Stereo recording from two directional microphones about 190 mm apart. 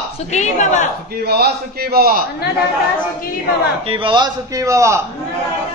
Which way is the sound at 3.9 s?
25° right (ahead or behind).